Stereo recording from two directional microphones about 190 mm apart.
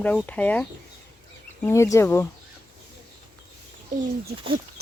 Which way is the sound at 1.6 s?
15° left (ahead or behind).